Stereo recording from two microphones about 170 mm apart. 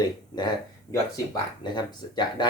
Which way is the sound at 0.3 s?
20° left (ahead or behind).